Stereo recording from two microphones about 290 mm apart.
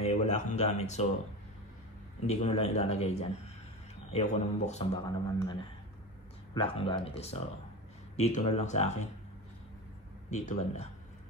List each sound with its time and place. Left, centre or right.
0.0 s speech: left
2.2 s speech: left
8.5 s speech: left
10.3 s speech: left